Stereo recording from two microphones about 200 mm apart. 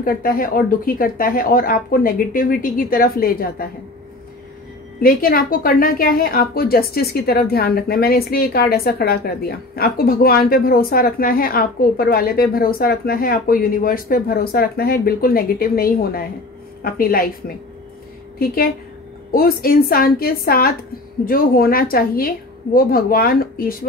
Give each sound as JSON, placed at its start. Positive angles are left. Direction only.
{"t": 0.0, "sound": "a woman's voice", "side_deg": 45}
{"t": 5.0, "sound": "a woman's voice", "side_deg": 45}
{"t": 18.4, "sound": "a woman's voice", "side_deg": 50}